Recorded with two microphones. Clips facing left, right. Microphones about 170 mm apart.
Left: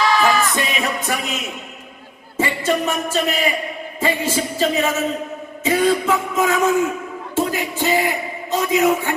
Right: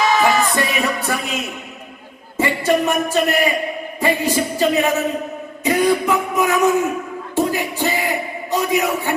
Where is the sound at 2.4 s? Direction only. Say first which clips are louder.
Right 3 dB; 15° right (ahead or behind).